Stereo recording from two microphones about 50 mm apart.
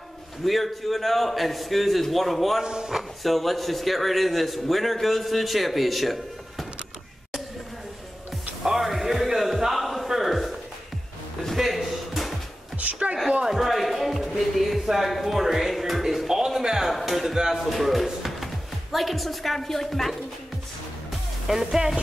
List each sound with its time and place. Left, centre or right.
0.5 s a man's voice: centre
2.6 s speech: centre
3.0 s a man's voice: centre
8.6 s a sound: centre
11.5 s a sound: centre
12.7 s music: right
13.5 s music: centre
17.4 s speech: centre
21.5 s speech: centre